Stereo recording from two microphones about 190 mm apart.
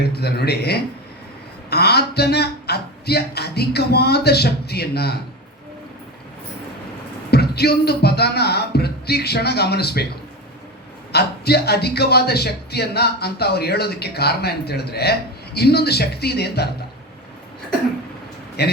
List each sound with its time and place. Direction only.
0.0 s speech: 55° left (ahead or behind)
7.3 s speech: 55° left (ahead or behind)
11.1 s speech: 60° left (ahead or behind)
18.6 s speech: 60° left (ahead or behind)